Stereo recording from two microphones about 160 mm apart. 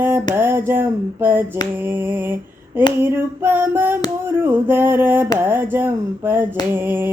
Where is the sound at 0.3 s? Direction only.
15° right (ahead or behind).